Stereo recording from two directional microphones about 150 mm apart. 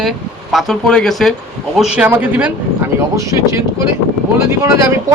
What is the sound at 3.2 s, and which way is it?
Speech, 20° right (ahead or behind).